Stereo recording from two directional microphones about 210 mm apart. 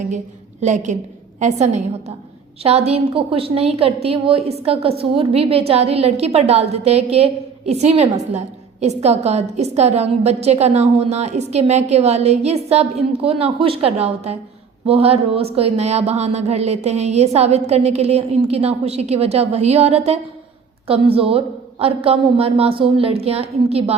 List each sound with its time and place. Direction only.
0.6 s a woman's voice: 35° right (ahead or behind)